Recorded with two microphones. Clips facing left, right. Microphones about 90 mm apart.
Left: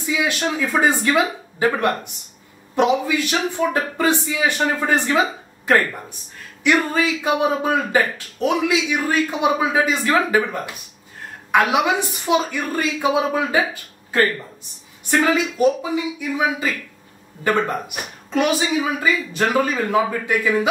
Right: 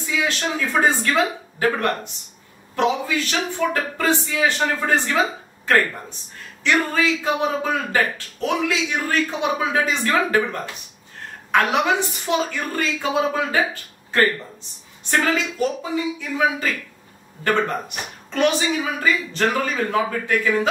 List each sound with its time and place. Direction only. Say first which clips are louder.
0.0 s speech: left 2 dB; 10° left (ahead or behind)
6.6 s speech: left 2 dB; 15° left (ahead or behind)
15.0 s speech: left 3 dB; 10° left (ahead or behind)